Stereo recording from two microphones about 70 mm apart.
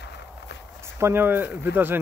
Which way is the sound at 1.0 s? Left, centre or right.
Right.